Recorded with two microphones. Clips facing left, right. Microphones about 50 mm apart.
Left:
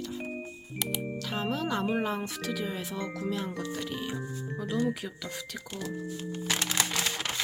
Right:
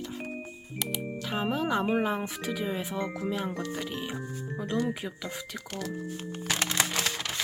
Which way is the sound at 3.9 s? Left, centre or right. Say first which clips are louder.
Even; centre.